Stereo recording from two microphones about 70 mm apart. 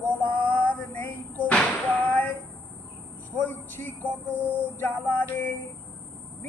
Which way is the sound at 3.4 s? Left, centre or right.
Left.